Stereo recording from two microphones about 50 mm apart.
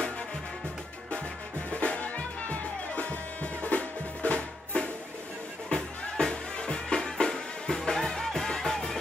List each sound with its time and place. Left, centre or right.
1.7 s music: left; by 8.9 s centre